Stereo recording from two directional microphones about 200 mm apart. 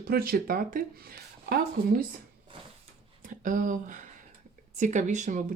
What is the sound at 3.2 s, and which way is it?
Speech, 40° right (ahead or behind).